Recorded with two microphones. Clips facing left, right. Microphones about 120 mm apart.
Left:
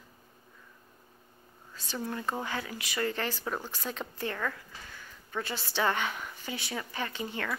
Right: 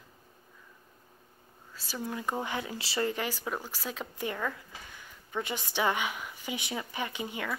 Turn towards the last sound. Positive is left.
turn(degrees=-10)  # may be behind; listen again after turning